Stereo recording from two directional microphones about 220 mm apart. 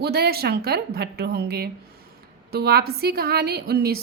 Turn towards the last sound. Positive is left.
turn(degrees=-45)  # may be behind; listen again after turning